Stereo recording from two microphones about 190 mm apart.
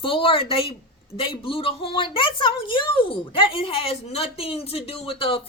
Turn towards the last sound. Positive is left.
turn(degrees=30)  # may be behind; listen again after turning